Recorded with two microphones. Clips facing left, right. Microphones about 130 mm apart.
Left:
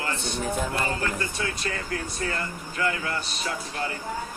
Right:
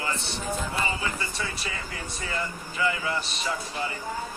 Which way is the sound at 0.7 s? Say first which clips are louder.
Left 2 dB; 65° left (ahead or behind).